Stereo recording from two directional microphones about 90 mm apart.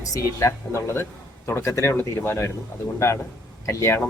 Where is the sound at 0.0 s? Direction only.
35° left (ahead or behind).